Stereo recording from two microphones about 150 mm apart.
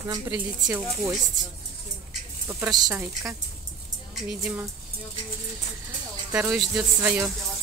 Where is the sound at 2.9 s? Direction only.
20° right (ahead or behind).